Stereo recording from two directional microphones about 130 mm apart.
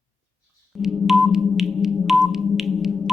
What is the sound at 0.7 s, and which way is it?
Music, centre (ahead or behind).